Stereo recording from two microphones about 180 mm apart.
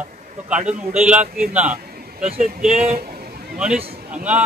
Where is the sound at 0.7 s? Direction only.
5° right (ahead or behind).